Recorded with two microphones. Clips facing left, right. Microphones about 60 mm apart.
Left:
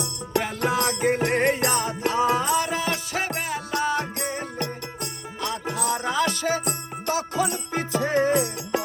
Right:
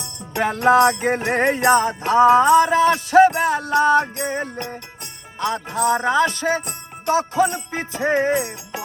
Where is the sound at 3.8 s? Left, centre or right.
Right.